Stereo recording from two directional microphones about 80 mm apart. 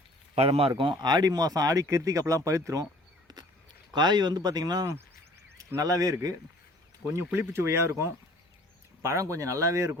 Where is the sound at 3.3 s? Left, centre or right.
Right.